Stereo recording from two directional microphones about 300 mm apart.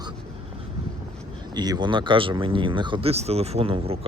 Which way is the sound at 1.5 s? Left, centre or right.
Centre.